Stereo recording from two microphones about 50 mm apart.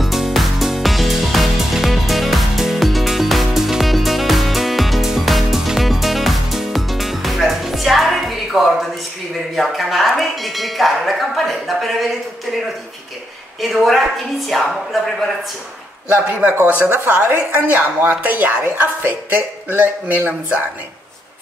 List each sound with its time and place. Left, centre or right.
0.0 s music: centre
13.6 s speech: centre
16.6 s a woman's voice: right
16.9 s a woman's voice: right
17.4 s a woman's voice: right